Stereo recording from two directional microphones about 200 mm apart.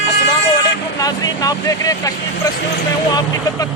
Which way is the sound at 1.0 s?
20° left (ahead or behind).